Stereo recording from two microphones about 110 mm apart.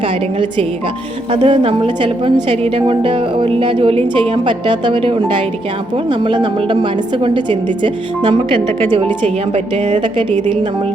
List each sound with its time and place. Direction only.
1.3 s a woman's voice: 50° right (ahead or behind)